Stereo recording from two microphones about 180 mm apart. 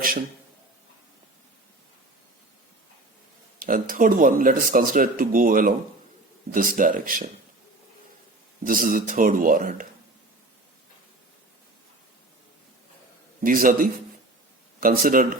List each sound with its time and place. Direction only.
3.6 s speech: 50° right (ahead or behind)
8.6 s speech: 50° right (ahead or behind)
13.4 s speech: 50° right (ahead or behind)